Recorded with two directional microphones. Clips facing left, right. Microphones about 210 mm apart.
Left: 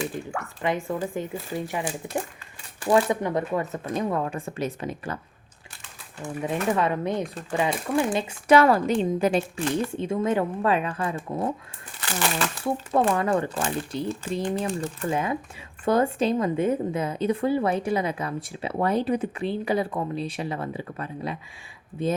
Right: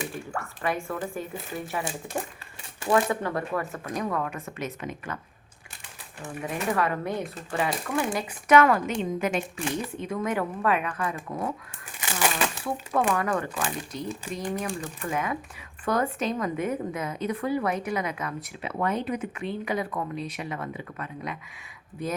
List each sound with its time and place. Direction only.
0.3 s a sound: 20° left (ahead or behind)
1.0 s speech: 20° left (ahead or behind)
3.1 s speech: 20° left (ahead or behind); by 5.2 s 35° left (ahead or behind)
6.2 s a woman's voice: 20° left (ahead or behind)
9.6 s speech: 5° right (ahead or behind)
10.0 s speech: 25° left (ahead or behind)
11.9 s speech: 15° right (ahead or behind)
13.1 s a woman's voice: 25° left (ahead or behind)